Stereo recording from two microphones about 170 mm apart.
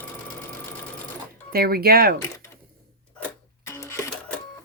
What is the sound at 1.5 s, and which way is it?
Speech, 65° right (ahead or behind).